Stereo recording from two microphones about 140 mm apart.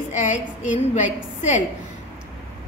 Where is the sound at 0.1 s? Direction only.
60° left (ahead or behind).